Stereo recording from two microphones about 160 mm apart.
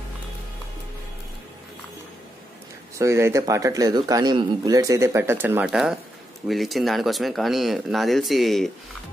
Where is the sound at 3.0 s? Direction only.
15° right (ahead or behind).